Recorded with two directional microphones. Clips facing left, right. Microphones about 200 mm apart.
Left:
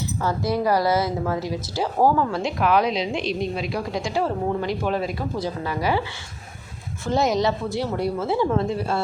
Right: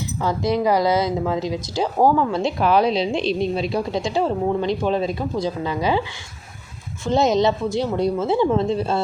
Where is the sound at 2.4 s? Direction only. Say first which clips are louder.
Right 3 dB; 30° right (ahead or behind).